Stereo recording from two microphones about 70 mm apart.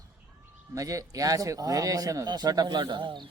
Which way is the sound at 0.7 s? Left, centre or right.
Right.